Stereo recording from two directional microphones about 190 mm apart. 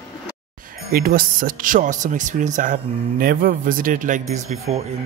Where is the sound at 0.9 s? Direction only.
50° right (ahead or behind).